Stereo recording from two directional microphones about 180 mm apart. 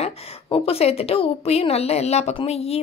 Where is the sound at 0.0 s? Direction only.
35° left (ahead or behind).